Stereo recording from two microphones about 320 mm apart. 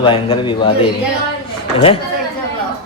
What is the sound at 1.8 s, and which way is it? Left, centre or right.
Speech, centre.